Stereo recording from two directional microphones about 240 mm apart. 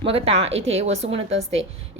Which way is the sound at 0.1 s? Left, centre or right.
Right.